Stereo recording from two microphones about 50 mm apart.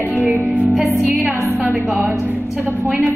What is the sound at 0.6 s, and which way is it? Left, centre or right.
Music, centre.